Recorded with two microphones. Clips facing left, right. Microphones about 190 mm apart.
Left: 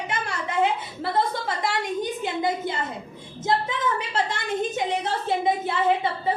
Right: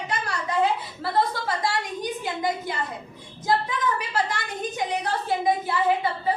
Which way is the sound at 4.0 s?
25° left (ahead or behind).